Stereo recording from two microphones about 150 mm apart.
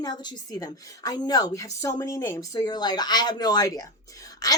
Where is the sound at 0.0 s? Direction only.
30° left (ahead or behind).